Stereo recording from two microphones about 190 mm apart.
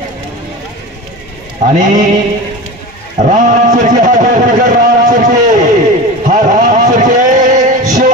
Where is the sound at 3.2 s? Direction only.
40° right (ahead or behind).